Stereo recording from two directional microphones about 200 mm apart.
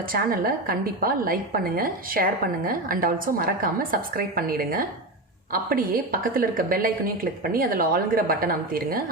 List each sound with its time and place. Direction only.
0.1 s a woman's voice: 45° right (ahead or behind)